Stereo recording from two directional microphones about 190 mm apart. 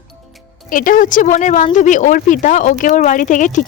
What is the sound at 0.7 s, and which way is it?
Speech, 45° left (ahead or behind).